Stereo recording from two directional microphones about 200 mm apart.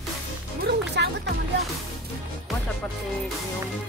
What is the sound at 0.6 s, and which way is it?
Music, 60° right (ahead or behind).